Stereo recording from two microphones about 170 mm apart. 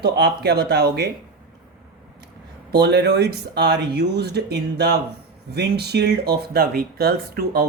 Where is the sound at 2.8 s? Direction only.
80° right.